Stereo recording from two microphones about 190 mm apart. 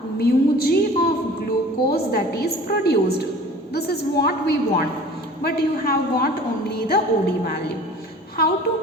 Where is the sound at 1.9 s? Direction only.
55° left (ahead or behind).